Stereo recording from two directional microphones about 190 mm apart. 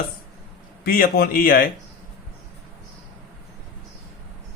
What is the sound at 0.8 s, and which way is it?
Speech, 50° left (ahead or behind).